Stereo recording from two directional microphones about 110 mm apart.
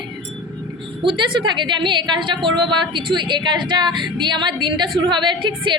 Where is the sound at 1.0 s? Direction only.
45° right (ahead or behind).